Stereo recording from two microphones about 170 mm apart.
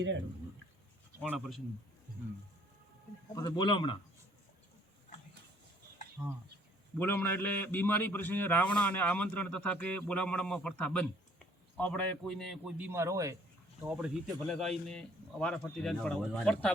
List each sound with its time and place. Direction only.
1.2 s speech: 5° right (ahead or behind)
3.3 s speech: 25° left (ahead or behind)
6.2 s speech: 15° right (ahead or behind)
7.0 s a man's voice: 10° left (ahead or behind)
12.7 s speech: 10° right (ahead or behind)
13.8 s speech: 5° right (ahead or behind)